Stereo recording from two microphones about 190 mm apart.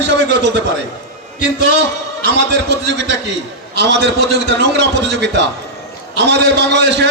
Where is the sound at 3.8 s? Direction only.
65° right (ahead or behind).